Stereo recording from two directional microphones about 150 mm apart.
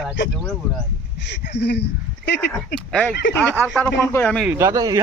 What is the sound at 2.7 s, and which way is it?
Speech, 5° left (ahead or behind).